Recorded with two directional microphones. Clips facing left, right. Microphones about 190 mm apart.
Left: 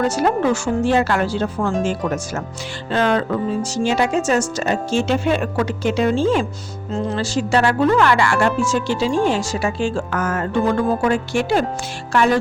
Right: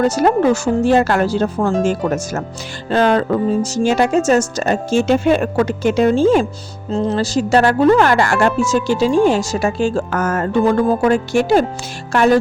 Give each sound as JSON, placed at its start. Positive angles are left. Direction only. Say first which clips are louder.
{"t": 0.0, "sound": "speech", "louder": "right 4 dB", "side_deg": -40}